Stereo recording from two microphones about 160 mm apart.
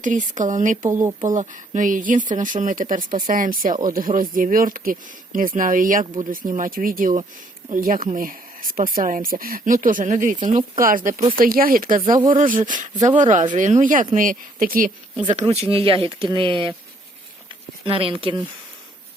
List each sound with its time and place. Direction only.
0.0 s speech: 55° right (ahead or behind)
15.1 s speech: 30° right (ahead or behind)
17.8 s speech: 35° right (ahead or behind)